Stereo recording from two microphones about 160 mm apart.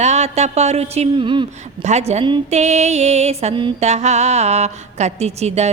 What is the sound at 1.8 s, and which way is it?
Speech, 45° right (ahead or behind).